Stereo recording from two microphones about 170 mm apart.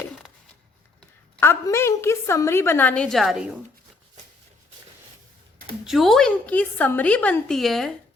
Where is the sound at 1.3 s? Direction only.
15° left (ahead or behind).